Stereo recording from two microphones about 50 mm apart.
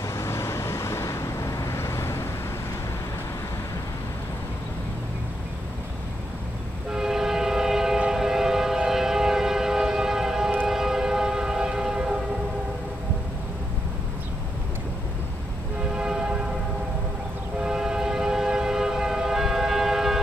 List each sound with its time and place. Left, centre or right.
0.1 s vehicle: left
6.9 s train: centre
15.9 s train: centre
17.6 s train: centre